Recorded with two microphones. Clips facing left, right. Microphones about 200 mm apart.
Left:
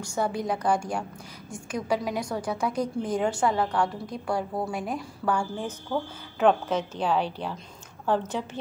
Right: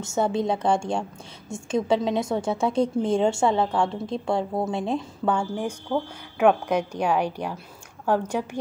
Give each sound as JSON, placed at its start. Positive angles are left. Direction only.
{"t": 0.0, "sound": "a woman's voice", "side_deg": -25}